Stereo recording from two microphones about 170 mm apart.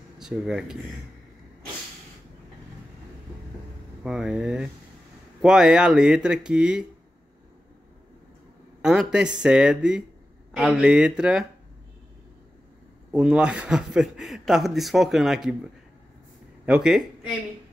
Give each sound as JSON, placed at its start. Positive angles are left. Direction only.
{"t": 0.2, "sound": "speech", "side_deg": 0}
{"t": 4.0, "sound": "a man's voice", "side_deg": -5}
{"t": 8.8, "sound": "a man's voice", "side_deg": -5}
{"t": 13.1, "sound": "a man's voice", "side_deg": -5}
{"t": 16.6, "sound": "a man's voice", "side_deg": -5}